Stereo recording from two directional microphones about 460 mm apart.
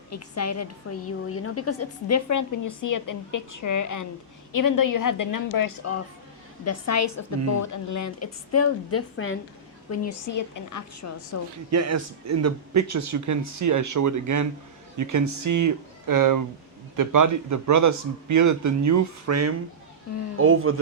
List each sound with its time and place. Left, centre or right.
0.1 s a woman's voice: left
11.7 s a man's voice: right